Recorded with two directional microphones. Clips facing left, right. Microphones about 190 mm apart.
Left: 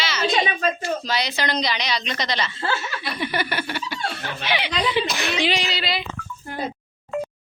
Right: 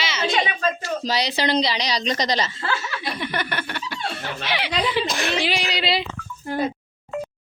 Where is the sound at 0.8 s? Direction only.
35° right (ahead or behind).